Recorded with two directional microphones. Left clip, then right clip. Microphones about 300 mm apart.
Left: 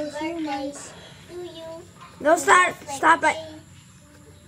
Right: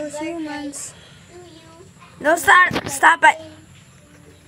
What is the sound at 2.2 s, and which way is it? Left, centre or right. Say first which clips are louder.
Speech: right 4 dB; centre.